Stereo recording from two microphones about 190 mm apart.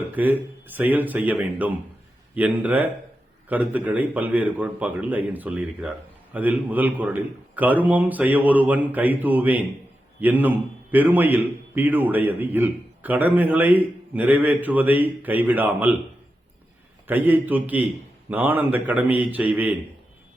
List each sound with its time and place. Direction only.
0.1 s a man's voice: 10° right (ahead or behind)
17.1 s a man's voice: 10° right (ahead or behind)